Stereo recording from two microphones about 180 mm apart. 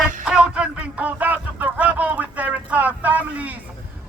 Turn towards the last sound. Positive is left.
turn(degrees=-10)  # may be behind; listen again after turning